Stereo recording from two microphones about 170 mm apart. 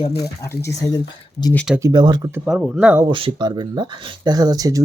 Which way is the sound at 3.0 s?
30° right (ahead or behind).